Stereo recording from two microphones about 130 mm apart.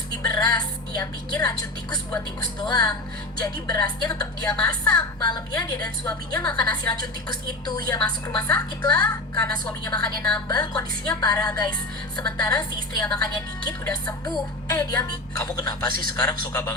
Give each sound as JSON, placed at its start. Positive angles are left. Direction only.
{"t": 0.2, "sound": "music", "side_deg": 30}
{"t": 2.6, "sound": "a woman's voice", "side_deg": 30}